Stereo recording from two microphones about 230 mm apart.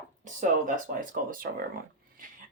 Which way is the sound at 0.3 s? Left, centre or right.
Right.